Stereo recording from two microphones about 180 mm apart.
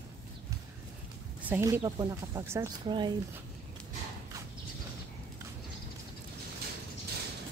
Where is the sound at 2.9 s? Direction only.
25° right (ahead or behind).